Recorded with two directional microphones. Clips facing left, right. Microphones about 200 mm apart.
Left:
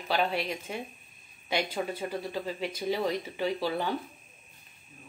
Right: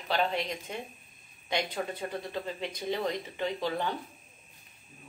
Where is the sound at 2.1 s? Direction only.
10° left (ahead or behind).